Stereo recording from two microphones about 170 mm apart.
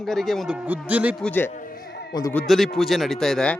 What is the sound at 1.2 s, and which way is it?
Speech, 10° left (ahead or behind).